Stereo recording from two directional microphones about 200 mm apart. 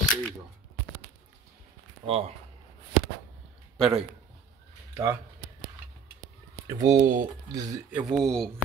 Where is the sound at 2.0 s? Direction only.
25° right (ahead or behind).